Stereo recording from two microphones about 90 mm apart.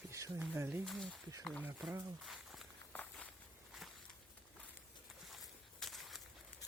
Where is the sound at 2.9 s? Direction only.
15° left (ahead or behind).